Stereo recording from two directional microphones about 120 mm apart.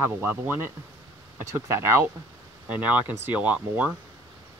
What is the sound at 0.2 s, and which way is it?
Speech, 15° right (ahead or behind).